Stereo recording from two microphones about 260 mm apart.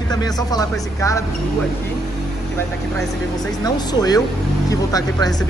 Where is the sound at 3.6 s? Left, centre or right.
Centre.